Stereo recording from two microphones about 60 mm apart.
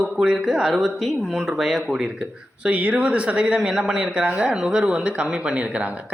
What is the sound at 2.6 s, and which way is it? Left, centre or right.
Speech, centre.